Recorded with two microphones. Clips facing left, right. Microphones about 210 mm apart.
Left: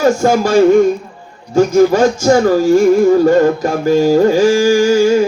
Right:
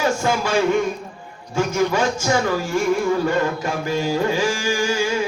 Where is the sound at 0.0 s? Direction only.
40° left (ahead or behind).